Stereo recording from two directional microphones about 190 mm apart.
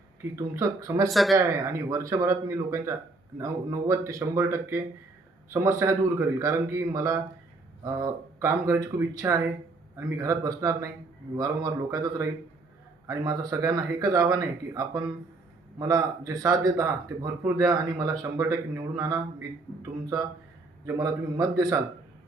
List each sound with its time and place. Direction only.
0.3 s a man's voice: 15° right (ahead or behind)
1.1 s speech: centre (ahead or behind)
1.5 s a man's voice: 15° right (ahead or behind)
20.8 s speech: 20° right (ahead or behind)